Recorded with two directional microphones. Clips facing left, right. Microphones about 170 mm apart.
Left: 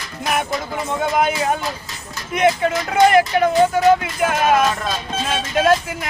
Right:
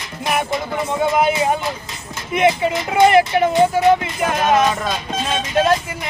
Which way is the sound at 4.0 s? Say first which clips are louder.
Left 1 dB; 5° left (ahead or behind).